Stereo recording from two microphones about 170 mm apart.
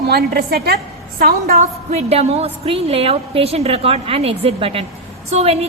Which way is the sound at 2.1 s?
35° right (ahead or behind).